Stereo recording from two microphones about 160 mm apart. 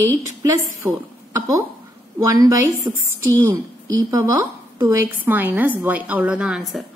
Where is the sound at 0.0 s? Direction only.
20° right (ahead or behind).